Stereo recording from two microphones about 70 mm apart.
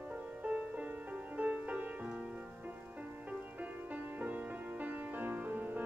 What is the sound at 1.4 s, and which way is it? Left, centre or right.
Music, centre.